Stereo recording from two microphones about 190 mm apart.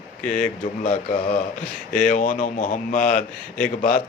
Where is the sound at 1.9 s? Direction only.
45° left (ahead or behind).